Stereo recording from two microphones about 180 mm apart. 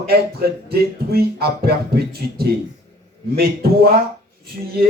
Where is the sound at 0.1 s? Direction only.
60° right (ahead or behind).